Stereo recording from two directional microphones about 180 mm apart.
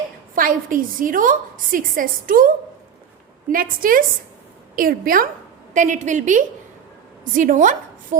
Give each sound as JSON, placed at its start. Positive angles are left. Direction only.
{"t": 0.3, "sound": "a woman's voice", "side_deg": -50}
{"t": 3.5, "sound": "a woman's voice", "side_deg": -50}